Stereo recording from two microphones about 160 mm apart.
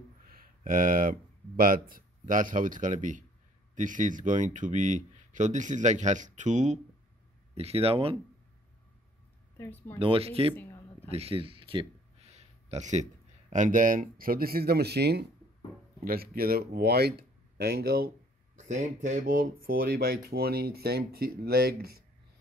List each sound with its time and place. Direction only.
0.3 s a sound: 60° right (ahead or behind)
1.6 s speech: 65° right (ahead or behind); by 8.2 s 35° right (ahead or behind)
9.6 s speech: 15° left (ahead or behind)
9.9 s speech: 35° right (ahead or behind)
10.5 s a sound: 10° left (ahead or behind)
11.1 s speech: 40° right (ahead or behind); by 15.2 s 90° right
16.0 s speech: 65° right (ahead or behind)
18.6 s speech: 50° right (ahead or behind); by 21.9 s 75° right (ahead or behind)